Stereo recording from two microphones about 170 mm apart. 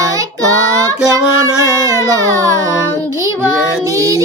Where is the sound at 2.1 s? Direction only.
20° right (ahead or behind).